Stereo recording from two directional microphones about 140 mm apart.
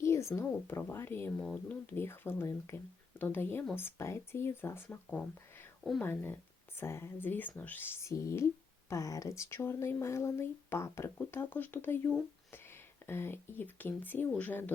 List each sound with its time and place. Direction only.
0.0 s speech: 20° left (ahead or behind)